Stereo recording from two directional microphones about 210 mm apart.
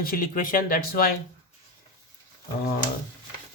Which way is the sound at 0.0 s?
45° left (ahead or behind).